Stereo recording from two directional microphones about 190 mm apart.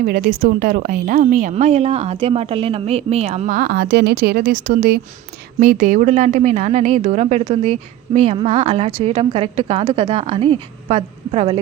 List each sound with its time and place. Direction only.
0.0 s a woman's voice: 50° right (ahead or behind); by 11.6 s 30° right (ahead or behind)